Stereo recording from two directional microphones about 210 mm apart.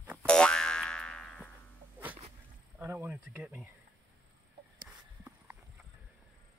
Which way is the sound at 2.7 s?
10° right (ahead or behind).